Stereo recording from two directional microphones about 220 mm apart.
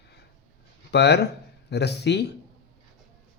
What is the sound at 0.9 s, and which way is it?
Speech, 50° left (ahead or behind).